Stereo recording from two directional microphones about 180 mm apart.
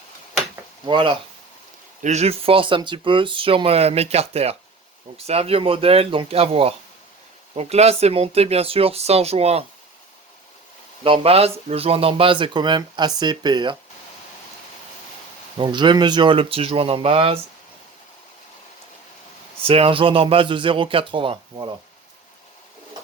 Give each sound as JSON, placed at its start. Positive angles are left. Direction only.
{"t": 0.9, "sound": "speech", "side_deg": -25}
{"t": 2.0, "sound": "speech", "side_deg": -40}
{"t": 11.0, "sound": "speech", "side_deg": -30}
{"t": 15.5, "sound": "speech", "side_deg": -25}
{"t": 19.6, "sound": "speech", "side_deg": -30}